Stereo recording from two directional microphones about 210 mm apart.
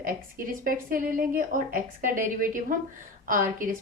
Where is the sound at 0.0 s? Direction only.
40° right (ahead or behind).